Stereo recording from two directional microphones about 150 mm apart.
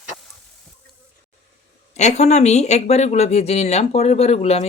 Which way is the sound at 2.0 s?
50° left (ahead or behind).